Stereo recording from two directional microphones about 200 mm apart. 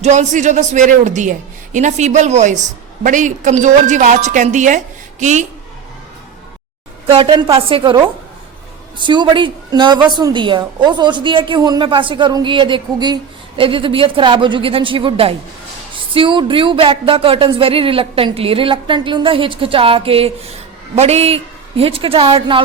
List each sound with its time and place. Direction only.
0.0 s a man's voice: 35° right (ahead or behind)
7.1 s a woman's voice: 25° right (ahead or behind)
9.0 s a woman's voice: 25° right (ahead or behind)